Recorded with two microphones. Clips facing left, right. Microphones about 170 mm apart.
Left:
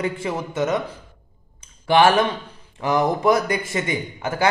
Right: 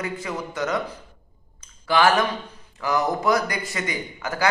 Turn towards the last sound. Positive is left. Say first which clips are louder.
# left 3 dB
turn(degrees=25)  # may be behind; listen again after turning